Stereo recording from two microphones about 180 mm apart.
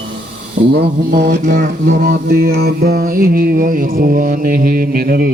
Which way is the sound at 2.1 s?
55° right (ahead or behind).